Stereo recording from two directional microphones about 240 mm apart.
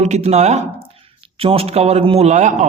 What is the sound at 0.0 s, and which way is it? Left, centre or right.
A man's voice, right.